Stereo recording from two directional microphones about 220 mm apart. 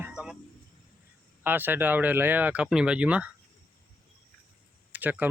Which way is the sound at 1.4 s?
10° right (ahead or behind).